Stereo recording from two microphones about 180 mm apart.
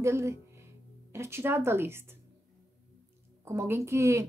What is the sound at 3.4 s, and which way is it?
Speech, 15° right (ahead or behind).